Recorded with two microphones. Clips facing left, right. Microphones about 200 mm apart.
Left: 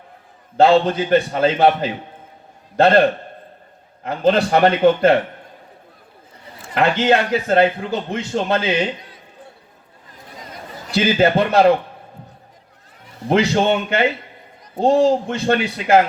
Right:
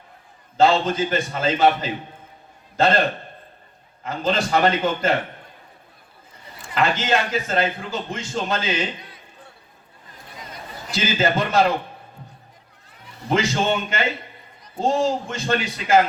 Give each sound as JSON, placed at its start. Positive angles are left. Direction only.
{"t": 0.5, "sound": "a man's voice", "side_deg": 60}
{"t": 4.0, "sound": "a man's voice", "side_deg": 60}
{"t": 6.7, "sound": "a man's voice", "side_deg": 60}
{"t": 10.9, "sound": "a man's voice", "side_deg": 60}
{"t": 13.2, "sound": "a man's voice", "side_deg": 60}